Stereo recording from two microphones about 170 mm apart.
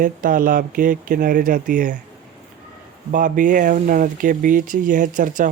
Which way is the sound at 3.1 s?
50° right (ahead or behind).